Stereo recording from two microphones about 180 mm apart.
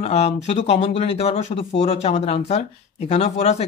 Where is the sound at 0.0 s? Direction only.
35° left (ahead or behind).